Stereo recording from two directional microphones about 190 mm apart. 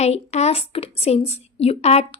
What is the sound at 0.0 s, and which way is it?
A woman's voice, 35° left (ahead or behind).